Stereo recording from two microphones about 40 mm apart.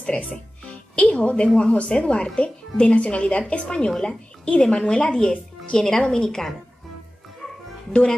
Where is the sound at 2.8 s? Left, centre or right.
Left; by 6.5 s centre.